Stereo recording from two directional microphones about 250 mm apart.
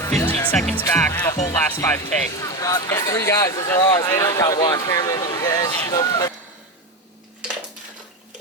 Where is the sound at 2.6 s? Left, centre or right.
Centre.